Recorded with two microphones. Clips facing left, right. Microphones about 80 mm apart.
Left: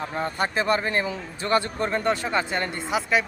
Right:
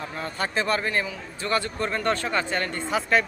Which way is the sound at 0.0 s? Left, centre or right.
Left.